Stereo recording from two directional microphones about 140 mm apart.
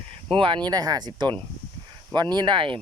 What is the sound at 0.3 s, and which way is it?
Speech, 35° right (ahead or behind).